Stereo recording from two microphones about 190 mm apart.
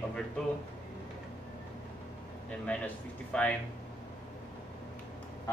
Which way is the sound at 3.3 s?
5° left (ahead or behind).